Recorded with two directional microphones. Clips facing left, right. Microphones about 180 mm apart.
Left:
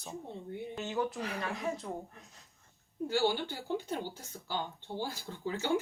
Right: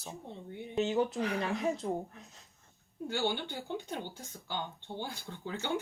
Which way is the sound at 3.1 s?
5° left (ahead or behind).